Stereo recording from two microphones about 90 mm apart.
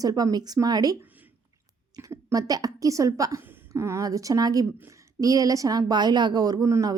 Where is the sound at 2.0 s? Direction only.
25° right (ahead or behind).